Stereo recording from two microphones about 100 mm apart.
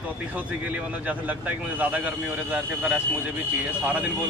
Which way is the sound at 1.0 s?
15° right (ahead or behind).